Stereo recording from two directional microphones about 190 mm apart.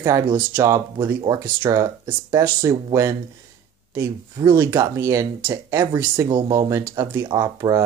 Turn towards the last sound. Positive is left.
turn(degrees=-20)  # may be behind; listen again after turning